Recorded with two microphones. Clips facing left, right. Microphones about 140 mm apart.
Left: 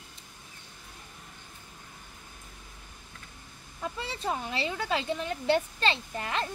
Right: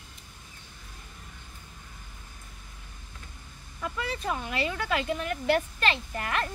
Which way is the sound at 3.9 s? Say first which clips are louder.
Right 2 dB; 30° left (ahead or behind).